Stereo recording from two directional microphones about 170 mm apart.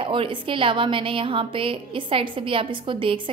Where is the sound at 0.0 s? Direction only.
30° right (ahead or behind).